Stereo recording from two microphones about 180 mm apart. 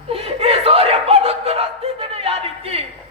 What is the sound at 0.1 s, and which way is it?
Snicker, 35° right (ahead or behind).